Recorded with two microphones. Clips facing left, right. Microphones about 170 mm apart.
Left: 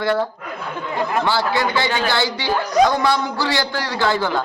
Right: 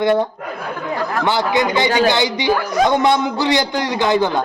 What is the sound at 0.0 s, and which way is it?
A man's voice, 20° right (ahead or behind).